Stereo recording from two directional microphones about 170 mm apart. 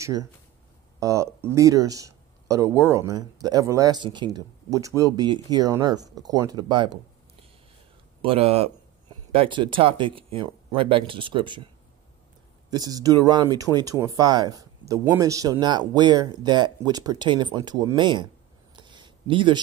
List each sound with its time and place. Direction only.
0.0 s speech: 20° right (ahead or behind)
8.2 s speech: 35° right (ahead or behind)
18.8 s a sound: 25° right (ahead or behind)